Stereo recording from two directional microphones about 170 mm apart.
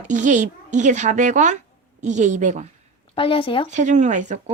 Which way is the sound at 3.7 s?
45° right (ahead or behind).